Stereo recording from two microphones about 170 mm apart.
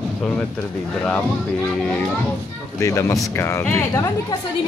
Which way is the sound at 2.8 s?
15° left (ahead or behind).